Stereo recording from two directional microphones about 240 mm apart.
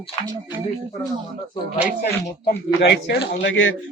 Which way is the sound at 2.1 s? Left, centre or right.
Left.